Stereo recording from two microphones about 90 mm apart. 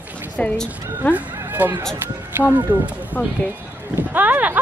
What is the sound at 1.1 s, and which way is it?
Speech, 20° right (ahead or behind).